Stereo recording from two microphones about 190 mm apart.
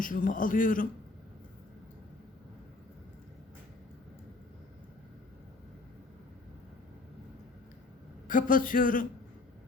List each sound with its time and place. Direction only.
0.0 s a man's voice: 45° left (ahead or behind)
8.3 s a man's voice: 45° left (ahead or behind)